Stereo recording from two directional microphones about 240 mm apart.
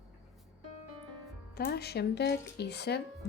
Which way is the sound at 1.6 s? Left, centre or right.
Left.